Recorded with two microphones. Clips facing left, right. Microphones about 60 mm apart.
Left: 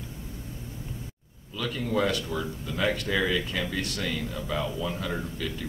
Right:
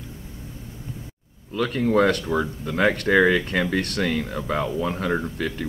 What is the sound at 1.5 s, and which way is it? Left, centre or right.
Speech, right.